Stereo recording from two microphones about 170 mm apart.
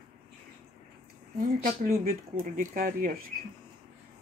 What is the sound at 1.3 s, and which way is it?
Speech, 55° right (ahead or behind).